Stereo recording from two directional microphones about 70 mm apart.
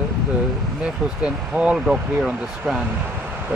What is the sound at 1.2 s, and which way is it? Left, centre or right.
Speech, centre.